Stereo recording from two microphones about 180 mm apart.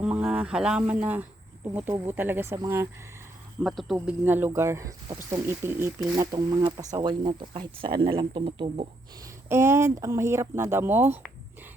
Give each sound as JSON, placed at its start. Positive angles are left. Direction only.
{"t": 0.0, "sound": "speech", "side_deg": -5}
{"t": 3.6, "sound": "speech", "side_deg": 0}
{"t": 3.9, "sound": "speech", "side_deg": -10}
{"t": 9.5, "sound": "speech", "side_deg": -15}